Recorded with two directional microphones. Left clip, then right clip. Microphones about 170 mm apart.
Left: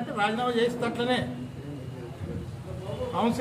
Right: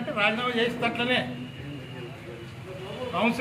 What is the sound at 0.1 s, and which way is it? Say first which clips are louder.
A man's voice: right 2 dB; 25° left (ahead or behind).